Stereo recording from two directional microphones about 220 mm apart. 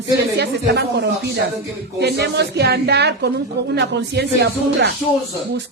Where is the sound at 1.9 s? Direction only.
50° right (ahead or behind).